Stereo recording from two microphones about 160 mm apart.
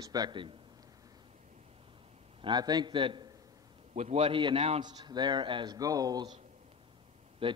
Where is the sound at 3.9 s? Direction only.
40° right (ahead or behind); by 6.3 s 25° right (ahead or behind).